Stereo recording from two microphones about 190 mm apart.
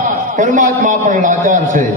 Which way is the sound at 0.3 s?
40° right (ahead or behind).